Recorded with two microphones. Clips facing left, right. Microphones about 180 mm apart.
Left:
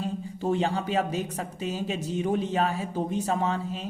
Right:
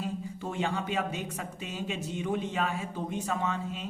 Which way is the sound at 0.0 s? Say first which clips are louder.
Left 5 dB; 35° left (ahead or behind).